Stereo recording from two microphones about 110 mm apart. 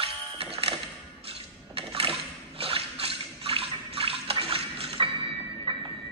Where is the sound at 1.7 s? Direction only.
60° right (ahead or behind).